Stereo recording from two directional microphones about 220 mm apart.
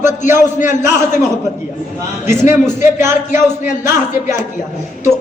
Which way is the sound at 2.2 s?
10° right (ahead or behind).